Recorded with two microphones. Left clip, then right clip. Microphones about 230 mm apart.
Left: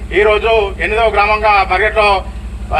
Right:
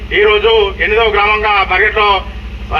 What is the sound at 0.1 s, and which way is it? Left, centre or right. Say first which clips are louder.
A man's voice: right 2 dB; left.